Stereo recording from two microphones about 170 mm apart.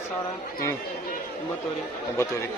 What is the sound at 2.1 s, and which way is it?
Speech, 15° left (ahead or behind).